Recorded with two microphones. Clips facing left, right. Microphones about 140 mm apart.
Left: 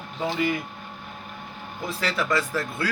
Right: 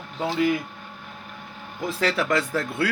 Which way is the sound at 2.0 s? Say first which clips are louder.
Right 2 dB; 65° right (ahead or behind).